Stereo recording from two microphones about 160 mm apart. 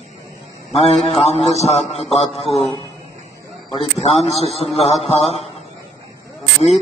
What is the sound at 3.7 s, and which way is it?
A man's voice, 35° left (ahead or behind).